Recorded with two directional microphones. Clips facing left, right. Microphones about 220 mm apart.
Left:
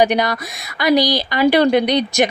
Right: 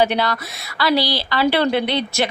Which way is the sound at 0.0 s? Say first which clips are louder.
Left 3 dB; 15° left (ahead or behind).